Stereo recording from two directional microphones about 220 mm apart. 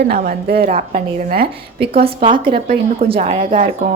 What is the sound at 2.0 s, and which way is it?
Speech, 25° right (ahead or behind).